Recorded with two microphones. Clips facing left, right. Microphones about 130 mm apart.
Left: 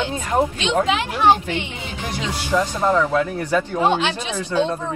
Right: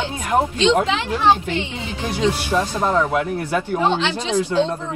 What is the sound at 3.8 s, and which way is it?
Speech, 15° left (ahead or behind).